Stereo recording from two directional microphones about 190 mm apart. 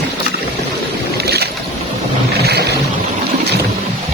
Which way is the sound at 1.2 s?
60° right (ahead or behind).